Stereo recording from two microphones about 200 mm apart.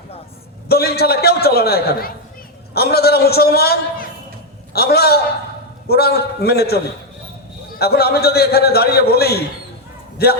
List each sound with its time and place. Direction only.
0.7 s a man's voice: 50° left (ahead or behind)